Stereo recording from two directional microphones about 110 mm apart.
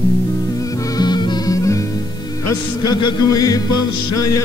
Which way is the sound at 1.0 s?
40° left (ahead or behind).